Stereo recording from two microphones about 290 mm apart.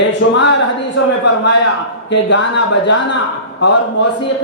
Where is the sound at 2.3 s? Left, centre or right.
Left.